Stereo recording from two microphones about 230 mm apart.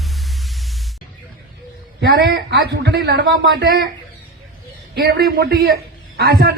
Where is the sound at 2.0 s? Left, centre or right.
Right.